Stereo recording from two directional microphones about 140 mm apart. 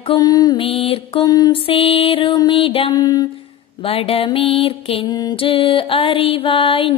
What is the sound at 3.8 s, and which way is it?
Music, 40° left (ahead or behind).